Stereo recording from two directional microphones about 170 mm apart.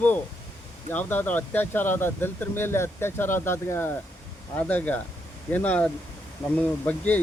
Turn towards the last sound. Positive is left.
turn(degrees=10)  # may be behind; listen again after turning